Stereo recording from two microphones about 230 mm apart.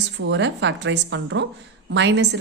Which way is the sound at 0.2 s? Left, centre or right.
Right.